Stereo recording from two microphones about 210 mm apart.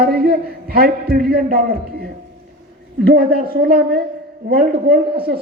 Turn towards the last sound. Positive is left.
turn(degrees=-45)  # may be behind; listen again after turning